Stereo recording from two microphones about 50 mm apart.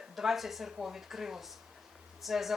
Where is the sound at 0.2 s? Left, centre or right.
Centre.